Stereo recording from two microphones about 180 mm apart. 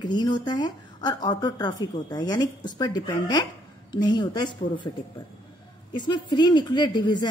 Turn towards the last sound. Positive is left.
turn(degrees=25)  # may be behind; listen again after turning